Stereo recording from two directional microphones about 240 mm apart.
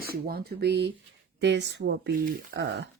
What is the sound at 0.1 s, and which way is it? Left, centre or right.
Speech, right.